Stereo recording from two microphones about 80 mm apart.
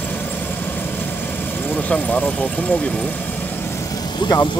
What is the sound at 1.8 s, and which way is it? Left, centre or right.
Speech, centre.